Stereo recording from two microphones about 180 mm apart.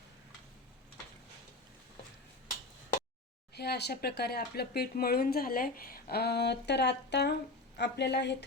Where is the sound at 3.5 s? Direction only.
65° left (ahead or behind).